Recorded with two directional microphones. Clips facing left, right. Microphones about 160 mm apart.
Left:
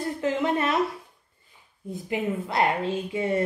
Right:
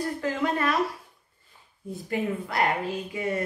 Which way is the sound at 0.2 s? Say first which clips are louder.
Left 3 dB; 20° left (ahead or behind).